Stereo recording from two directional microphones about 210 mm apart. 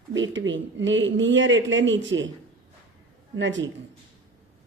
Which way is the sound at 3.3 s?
60° right (ahead or behind).